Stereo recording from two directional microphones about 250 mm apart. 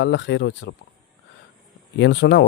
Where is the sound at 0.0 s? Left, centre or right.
Left.